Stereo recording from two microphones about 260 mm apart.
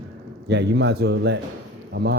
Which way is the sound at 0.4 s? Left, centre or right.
Right.